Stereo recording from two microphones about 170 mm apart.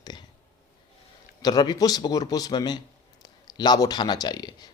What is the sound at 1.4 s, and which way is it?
A man's voice, 25° left (ahead or behind).